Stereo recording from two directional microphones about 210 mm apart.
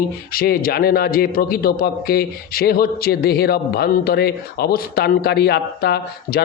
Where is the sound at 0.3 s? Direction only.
45° left (ahead or behind).